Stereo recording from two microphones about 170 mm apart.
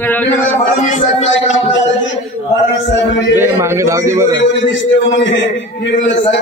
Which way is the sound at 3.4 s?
15° right (ahead or behind).